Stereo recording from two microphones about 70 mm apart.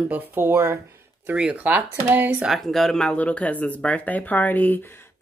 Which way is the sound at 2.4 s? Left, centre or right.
Centre.